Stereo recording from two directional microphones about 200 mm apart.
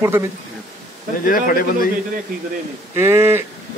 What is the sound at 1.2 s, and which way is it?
Speech, 45° left (ahead or behind).